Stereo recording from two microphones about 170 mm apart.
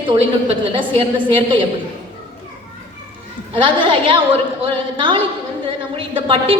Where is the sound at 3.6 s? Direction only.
30° right (ahead or behind).